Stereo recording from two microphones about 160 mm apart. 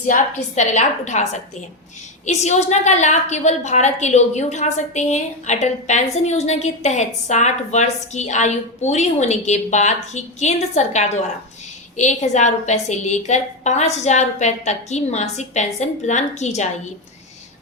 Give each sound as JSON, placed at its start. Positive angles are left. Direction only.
{"t": 0.1, "sound": "a woman's voice", "side_deg": 50}